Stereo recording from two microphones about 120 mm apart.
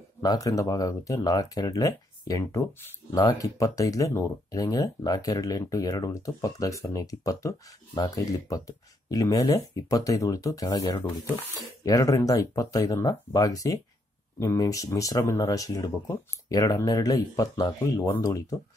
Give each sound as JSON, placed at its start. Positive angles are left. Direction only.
{"t": 0.2, "sound": "speech", "side_deg": 30}